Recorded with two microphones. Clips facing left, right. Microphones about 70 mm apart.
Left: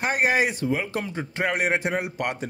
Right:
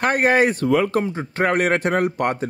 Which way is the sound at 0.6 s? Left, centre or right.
Right.